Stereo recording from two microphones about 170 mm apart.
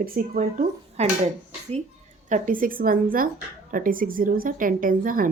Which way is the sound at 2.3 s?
55° right (ahead or behind).